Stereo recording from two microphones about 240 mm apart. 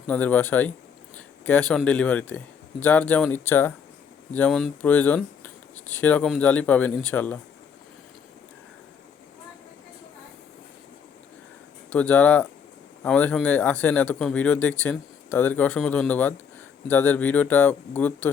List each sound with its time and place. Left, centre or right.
0.1 s speech: centre
11.9 s speech: centre